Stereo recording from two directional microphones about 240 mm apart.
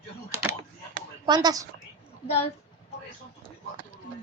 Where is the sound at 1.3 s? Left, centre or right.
Centre.